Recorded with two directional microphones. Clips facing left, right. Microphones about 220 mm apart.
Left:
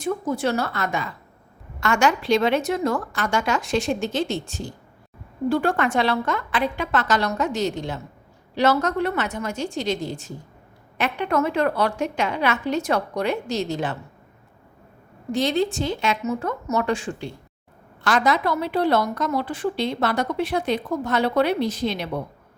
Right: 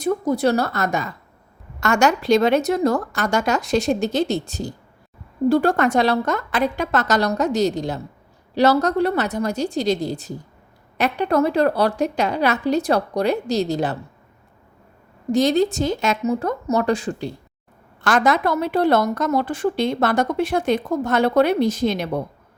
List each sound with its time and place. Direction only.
0.0 s a woman's voice: 40° right (ahead or behind)
15.3 s a woman's voice: 40° right (ahead or behind)
18.0 s a woman's voice: 50° right (ahead or behind)